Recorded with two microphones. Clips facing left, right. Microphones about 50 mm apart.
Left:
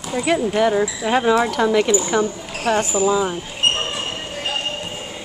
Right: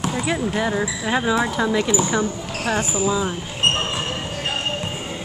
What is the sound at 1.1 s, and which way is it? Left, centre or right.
Speech, centre.